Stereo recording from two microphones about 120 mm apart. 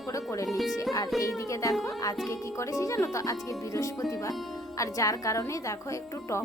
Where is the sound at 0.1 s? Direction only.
25° left (ahead or behind).